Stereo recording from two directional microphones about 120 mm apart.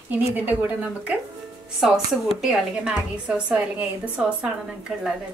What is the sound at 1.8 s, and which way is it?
A woman's voice, centre (ahead or behind).